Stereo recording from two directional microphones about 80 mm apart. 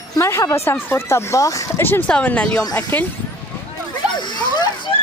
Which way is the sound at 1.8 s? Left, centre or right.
Left.